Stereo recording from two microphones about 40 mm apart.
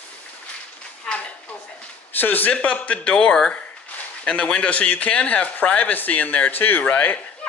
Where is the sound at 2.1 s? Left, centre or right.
Left.